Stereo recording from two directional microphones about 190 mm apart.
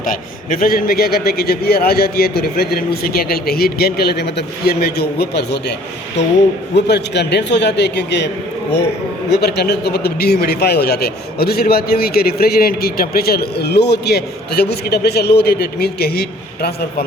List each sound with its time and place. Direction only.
0.0 s a man's voice: 45° left (ahead or behind)
6.7 s a man's voice: 65° left (ahead or behind)
9.3 s a man's voice: 60° left (ahead or behind)